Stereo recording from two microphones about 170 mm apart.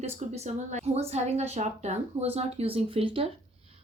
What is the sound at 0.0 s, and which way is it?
Speech, 40° right (ahead or behind).